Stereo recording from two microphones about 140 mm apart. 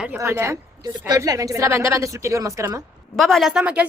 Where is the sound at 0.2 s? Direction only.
20° right (ahead or behind).